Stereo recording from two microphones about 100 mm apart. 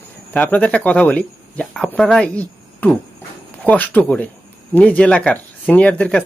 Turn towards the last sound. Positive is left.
turn(degrees=10)  # may be behind; listen again after turning